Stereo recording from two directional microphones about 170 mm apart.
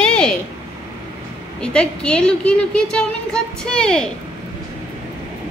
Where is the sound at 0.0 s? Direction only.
5° left (ahead or behind).